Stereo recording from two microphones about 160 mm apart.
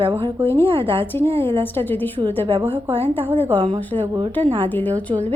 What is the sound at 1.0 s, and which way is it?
Speech, 15° left (ahead or behind).